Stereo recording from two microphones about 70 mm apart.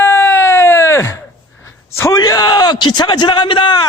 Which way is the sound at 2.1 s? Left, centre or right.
Left.